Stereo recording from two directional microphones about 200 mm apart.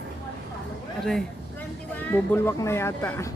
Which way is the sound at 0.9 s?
Centre (ahead or behind).